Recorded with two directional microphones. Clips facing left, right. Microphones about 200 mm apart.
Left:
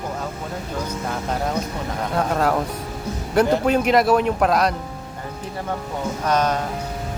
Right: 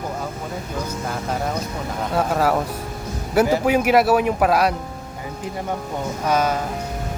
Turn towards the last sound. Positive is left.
turn(degrees=-5)  # may be behind; listen again after turning